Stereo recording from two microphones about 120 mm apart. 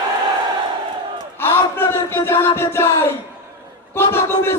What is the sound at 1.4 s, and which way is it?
Speech, 20° left (ahead or behind).